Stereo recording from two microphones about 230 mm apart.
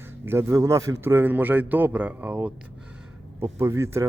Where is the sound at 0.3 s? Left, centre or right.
Centre.